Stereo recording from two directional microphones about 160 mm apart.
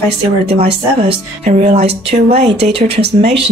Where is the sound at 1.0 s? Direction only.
40° right (ahead or behind).